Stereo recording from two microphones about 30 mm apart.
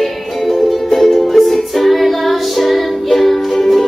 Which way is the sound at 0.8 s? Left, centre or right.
Centre.